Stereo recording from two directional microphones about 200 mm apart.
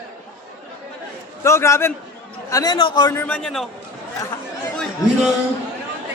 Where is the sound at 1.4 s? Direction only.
15° left (ahead or behind).